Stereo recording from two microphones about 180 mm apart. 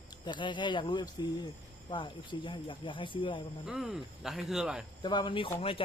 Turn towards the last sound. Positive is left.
turn(degrees=30)  # may be behind; listen again after turning